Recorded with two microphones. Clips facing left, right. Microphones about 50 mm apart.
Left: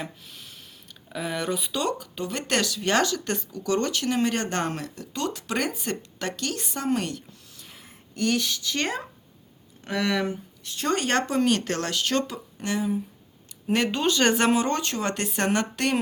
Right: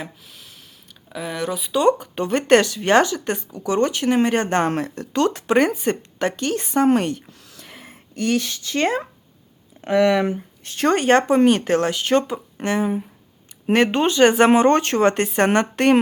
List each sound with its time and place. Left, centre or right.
0.0 s speech: centre
2.1 s speech: right
4.7 s speech: right
5.5 s speech: right
7.5 s whispering: right
8.1 s speech: right
9.9 s speech: right
10.2 s speech: right
11.0 s speech: right
12.5 s speech: right
14.1 s speech: right
14.5 s speech: right